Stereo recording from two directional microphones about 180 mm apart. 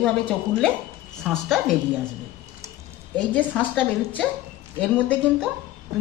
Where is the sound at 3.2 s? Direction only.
5° left (ahead or behind).